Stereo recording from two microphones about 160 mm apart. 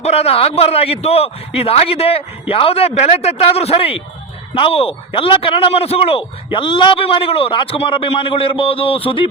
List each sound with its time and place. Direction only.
0.0 s a man's voice: 40° left (ahead or behind)